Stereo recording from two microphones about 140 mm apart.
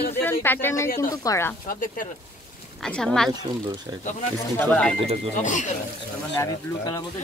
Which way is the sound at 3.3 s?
30° right (ahead or behind).